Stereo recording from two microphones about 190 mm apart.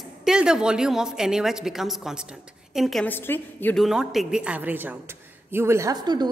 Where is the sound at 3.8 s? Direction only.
Centre (ahead or behind).